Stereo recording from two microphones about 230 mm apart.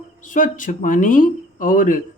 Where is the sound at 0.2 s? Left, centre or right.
Left.